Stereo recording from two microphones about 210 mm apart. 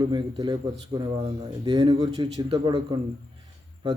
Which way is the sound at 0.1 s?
20° right (ahead or behind).